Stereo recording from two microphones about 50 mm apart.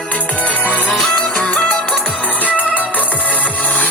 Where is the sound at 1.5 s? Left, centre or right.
Left.